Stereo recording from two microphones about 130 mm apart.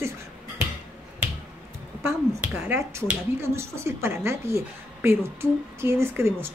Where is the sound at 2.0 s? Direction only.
15° right (ahead or behind).